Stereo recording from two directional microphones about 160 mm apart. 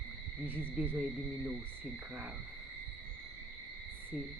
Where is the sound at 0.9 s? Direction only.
10° right (ahead or behind).